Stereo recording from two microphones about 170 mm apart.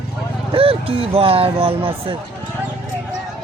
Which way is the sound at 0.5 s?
35° right (ahead or behind).